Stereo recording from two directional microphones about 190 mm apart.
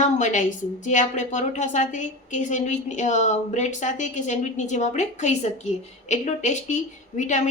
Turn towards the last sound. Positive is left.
turn(degrees=40)  # may be behind; listen again after turning